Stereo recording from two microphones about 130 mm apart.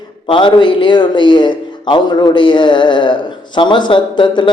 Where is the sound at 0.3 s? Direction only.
40° left (ahead or behind).